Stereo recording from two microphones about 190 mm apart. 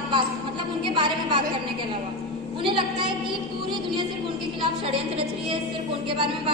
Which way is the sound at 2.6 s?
25° right (ahead or behind).